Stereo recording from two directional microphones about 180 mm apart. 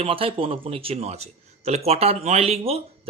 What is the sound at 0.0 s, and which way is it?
A man's voice, 30° right (ahead or behind).